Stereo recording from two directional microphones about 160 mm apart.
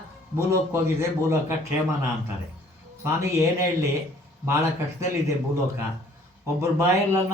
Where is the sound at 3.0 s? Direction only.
20° right (ahead or behind).